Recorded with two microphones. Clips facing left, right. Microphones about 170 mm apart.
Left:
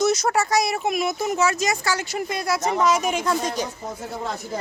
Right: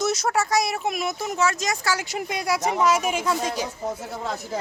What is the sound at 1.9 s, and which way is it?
Speech, 15° right (ahead or behind).